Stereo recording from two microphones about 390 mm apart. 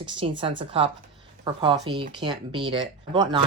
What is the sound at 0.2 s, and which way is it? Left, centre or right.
Speech, centre.